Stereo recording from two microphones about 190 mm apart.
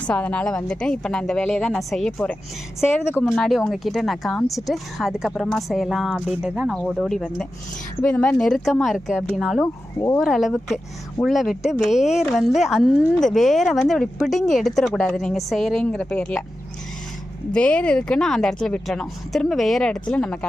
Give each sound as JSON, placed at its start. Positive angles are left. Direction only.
{"t": 0.0, "sound": "speech", "side_deg": 5}
{"t": 17.5, "sound": "speech", "side_deg": 5}